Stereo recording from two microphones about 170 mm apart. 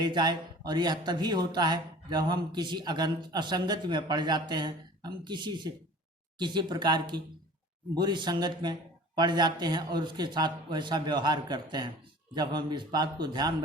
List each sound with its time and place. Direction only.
0.0 s speech: 25° right (ahead or behind)